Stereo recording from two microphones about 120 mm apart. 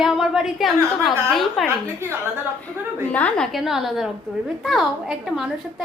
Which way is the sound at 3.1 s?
10° left (ahead or behind).